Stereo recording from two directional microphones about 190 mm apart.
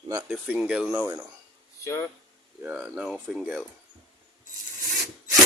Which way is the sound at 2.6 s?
10° right (ahead or behind).